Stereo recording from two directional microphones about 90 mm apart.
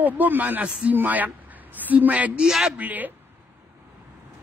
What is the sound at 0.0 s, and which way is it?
A man's voice, 20° right (ahead or behind).